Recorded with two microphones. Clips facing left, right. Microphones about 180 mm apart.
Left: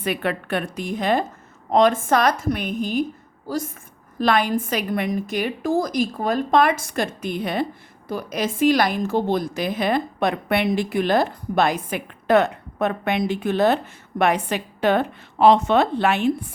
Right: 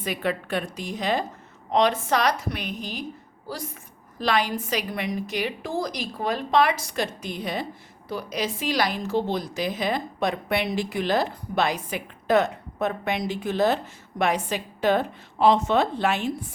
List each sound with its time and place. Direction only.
0.0 s a woman's voice: 60° left (ahead or behind)